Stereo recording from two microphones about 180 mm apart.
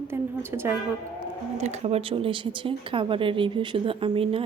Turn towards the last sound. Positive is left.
turn(degrees=-30)  # may be behind; listen again after turning